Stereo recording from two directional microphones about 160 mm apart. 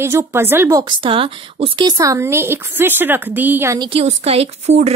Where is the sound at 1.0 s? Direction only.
35° right (ahead or behind).